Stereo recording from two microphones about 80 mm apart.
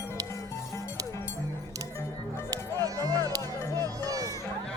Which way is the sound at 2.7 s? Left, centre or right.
Right.